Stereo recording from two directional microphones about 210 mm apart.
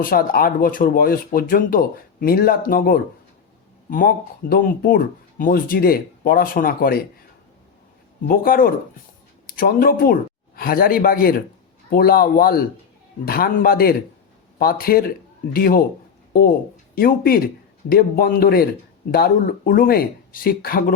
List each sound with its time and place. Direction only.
0.0 s speech: 45° left (ahead or behind)
8.3 s speech: 45° left (ahead or behind)
16.9 s speech: 45° left (ahead or behind)